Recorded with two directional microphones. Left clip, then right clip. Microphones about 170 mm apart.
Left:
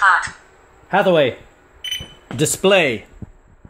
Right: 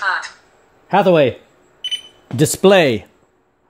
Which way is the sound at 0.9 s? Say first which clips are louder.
Right 2 dB; 55° right (ahead or behind).